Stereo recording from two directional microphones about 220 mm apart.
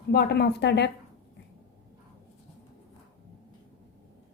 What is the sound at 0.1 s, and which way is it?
Speech, 50° left (ahead or behind).